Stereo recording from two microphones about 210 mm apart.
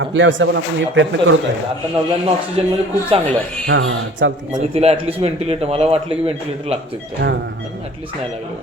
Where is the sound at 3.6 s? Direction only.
60° right (ahead or behind).